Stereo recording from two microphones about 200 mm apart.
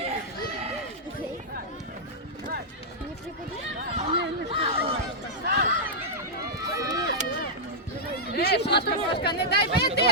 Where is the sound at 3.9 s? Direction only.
30° right (ahead or behind).